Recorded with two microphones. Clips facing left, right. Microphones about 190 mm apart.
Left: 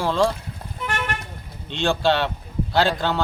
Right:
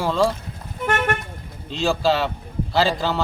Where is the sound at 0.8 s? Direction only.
50° right (ahead or behind).